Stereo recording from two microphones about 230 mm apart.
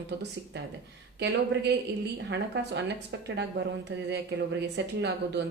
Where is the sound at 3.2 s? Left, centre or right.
Right.